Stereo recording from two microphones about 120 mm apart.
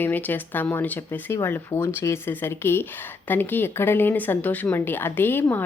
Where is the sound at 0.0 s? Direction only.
15° left (ahead or behind).